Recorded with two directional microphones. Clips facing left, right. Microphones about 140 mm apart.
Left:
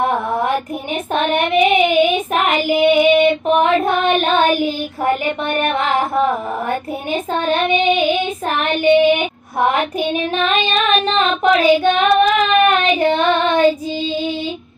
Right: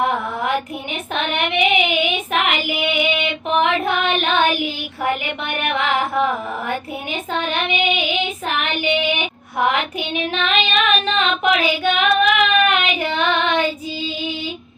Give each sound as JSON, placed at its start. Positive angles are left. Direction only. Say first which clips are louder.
{"t": 0.0, "sound": "child singing", "louder": "left 3 dB", "side_deg": 35}